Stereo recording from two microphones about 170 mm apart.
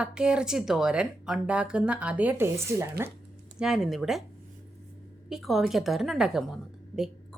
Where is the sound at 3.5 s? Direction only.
5° right (ahead or behind).